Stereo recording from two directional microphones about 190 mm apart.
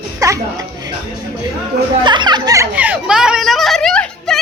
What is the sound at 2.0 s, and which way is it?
Speech, 25° right (ahead or behind).